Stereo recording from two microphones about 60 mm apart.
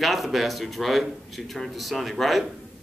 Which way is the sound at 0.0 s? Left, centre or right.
Centre.